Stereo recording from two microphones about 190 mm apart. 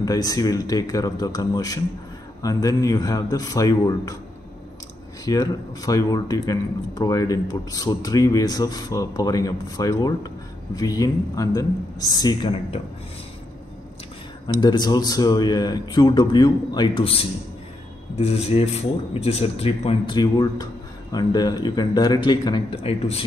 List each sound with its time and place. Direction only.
0.0 s speech: 20° left (ahead or behind)
5.2 s speech: 20° left (ahead or behind)
14.6 s speech: 25° left (ahead or behind)